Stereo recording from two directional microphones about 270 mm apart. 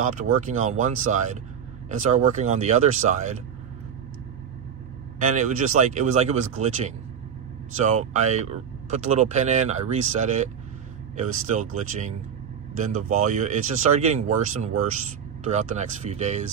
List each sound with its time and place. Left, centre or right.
0.2 s speech: right
5.2 s speech: right
7.8 s speech: right